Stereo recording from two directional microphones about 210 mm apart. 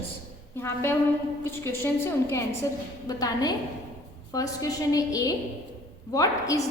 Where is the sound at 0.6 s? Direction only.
10° left (ahead or behind).